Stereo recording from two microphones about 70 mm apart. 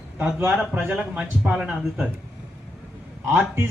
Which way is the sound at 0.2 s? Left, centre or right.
Right.